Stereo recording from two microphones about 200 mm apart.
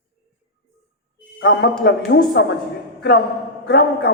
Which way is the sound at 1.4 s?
65° left (ahead or behind).